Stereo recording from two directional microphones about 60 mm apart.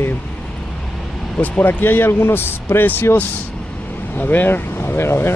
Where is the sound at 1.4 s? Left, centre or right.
Left.